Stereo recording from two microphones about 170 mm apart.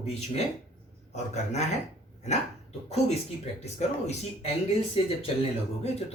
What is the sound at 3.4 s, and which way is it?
Speech, 40° left (ahead or behind).